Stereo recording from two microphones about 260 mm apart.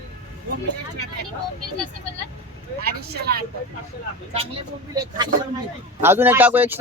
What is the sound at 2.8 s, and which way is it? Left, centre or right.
Speech, right.